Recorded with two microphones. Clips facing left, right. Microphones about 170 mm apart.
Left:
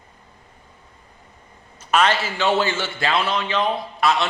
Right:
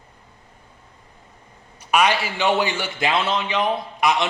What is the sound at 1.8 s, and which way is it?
A man's voice, 15° right (ahead or behind).